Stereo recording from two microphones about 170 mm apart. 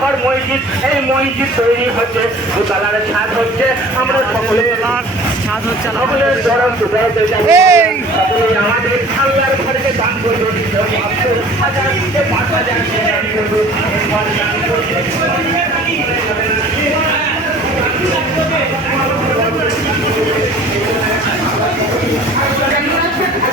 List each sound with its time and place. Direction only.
7.5 s a man's voice: 15° right (ahead or behind)